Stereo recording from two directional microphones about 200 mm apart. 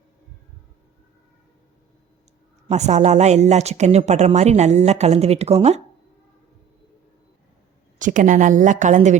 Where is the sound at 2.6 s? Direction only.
35° right (ahead or behind).